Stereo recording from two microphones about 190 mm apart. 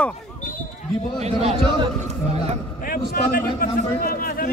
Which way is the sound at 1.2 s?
35° right (ahead or behind).